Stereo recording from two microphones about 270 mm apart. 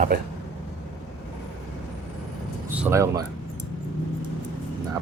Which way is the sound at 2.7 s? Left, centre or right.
Centre.